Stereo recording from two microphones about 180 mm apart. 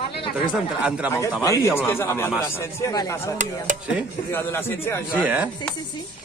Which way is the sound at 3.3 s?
45° right (ahead or behind).